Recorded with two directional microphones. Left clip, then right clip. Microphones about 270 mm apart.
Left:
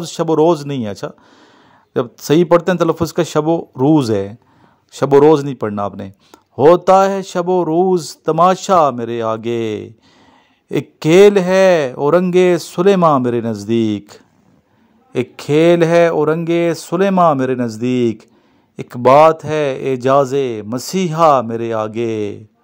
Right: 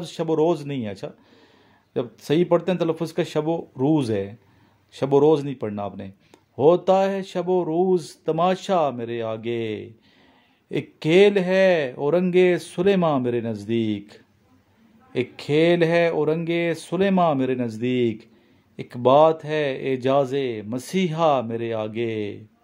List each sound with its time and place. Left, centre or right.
0.0 s a man's voice: left